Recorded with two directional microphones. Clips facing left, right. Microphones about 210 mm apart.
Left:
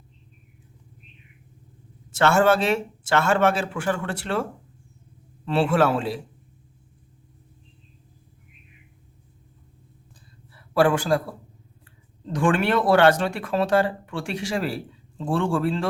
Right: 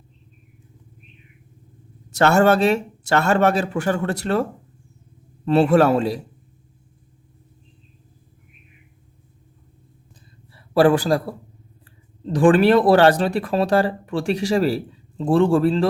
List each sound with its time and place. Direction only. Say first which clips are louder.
2.0 s speech: right 3 dB; 40° right (ahead or behind)
5.5 s speech: right 5 dB; 40° right (ahead or behind)
10.5 s a sound: right 5 dB; 35° right (ahead or behind)
12.3 s speech: right 7 dB; 35° right (ahead or behind)